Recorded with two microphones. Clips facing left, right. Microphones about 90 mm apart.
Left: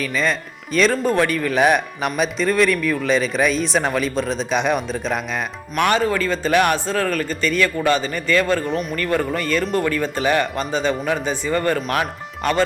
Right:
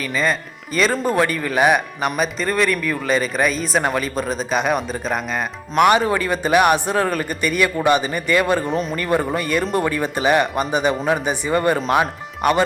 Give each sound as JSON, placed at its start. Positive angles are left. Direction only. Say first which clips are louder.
{"t": 0.0, "sound": "speech", "louder": "even", "side_deg": -5}
{"t": 5.7, "sound": "speech", "louder": "right 3 dB", "side_deg": -15}
{"t": 8.6, "sound": "speech", "louder": "right 1 dB", "side_deg": 0}
{"t": 9.0, "sound": "speech", "louder": "even", "side_deg": -15}